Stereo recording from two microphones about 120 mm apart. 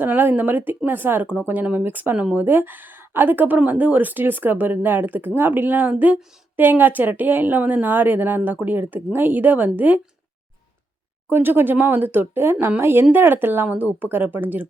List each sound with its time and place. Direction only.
0.0 s speech: 15° right (ahead or behind)
11.3 s speech: 15° right (ahead or behind)